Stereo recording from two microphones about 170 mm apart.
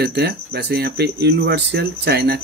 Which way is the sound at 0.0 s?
75° right (ahead or behind).